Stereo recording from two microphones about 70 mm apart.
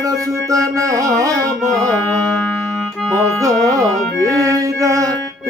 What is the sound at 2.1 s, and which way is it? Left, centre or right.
Music, centre.